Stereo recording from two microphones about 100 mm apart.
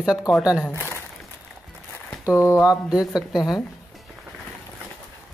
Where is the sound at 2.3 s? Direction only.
25° left (ahead or behind).